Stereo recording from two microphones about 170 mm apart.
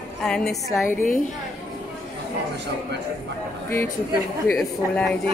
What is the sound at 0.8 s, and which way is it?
Speech, 50° left (ahead or behind).